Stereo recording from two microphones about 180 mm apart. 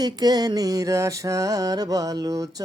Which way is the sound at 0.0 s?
20° right (ahead or behind).